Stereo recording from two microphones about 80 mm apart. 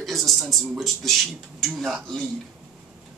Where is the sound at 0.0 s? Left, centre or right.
Centre.